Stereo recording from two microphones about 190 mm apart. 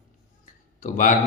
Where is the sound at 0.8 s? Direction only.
40° left (ahead or behind).